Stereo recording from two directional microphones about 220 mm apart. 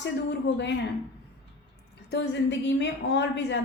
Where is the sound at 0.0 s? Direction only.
50° left (ahead or behind).